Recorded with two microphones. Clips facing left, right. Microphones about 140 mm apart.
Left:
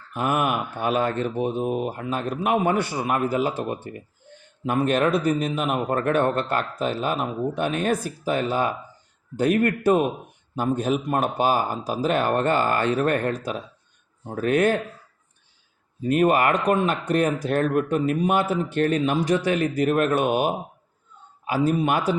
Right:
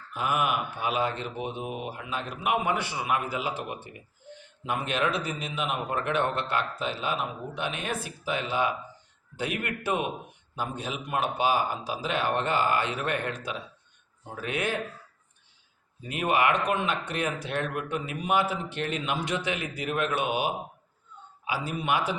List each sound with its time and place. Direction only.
0.1 s speech: 50° left (ahead or behind)
16.0 s speech: 45° left (ahead or behind)